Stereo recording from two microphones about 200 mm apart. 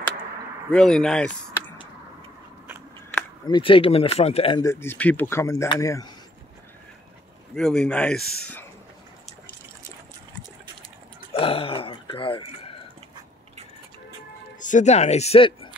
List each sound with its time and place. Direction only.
0.7 s speech: 5° left (ahead or behind)
3.4 s speech: 25° left (ahead or behind)
4.6 s speech: 15° left (ahead or behind)
7.5 s speech: 5° left (ahead or behind)
11.3 s speech: 25° left (ahead or behind)
14.6 s speech: 40° left (ahead or behind)